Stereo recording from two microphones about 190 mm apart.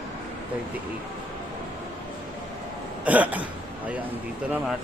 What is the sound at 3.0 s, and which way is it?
Speech, 10° right (ahead or behind).